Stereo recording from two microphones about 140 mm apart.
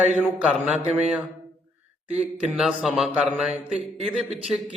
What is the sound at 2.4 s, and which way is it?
Speech, 5° right (ahead or behind).